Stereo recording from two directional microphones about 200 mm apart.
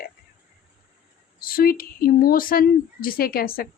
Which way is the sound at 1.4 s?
45° left (ahead or behind).